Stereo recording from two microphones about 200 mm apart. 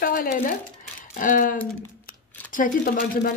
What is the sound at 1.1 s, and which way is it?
Speech, 40° left (ahead or behind).